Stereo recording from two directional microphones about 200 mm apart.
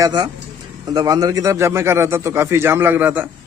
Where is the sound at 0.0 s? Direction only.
20° right (ahead or behind).